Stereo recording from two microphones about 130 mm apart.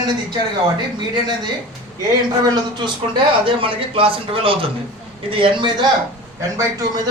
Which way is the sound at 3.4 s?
45° right (ahead or behind).